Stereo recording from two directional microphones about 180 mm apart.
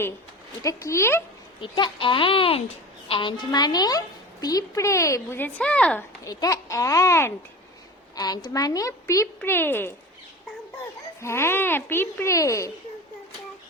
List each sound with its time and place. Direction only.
0.6 s a woman's voice: 15° left (ahead or behind)
1.6 s a woman's voice: 25° left (ahead or behind); by 6.1 s 5° left (ahead or behind)
6.2 s a woman's voice: 20° left (ahead or behind)
11.2 s a woman's voice: 15° left (ahead or behind)